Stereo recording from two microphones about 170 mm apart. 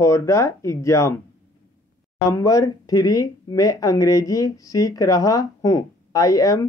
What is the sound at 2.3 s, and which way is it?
Speech, 20° left (ahead or behind).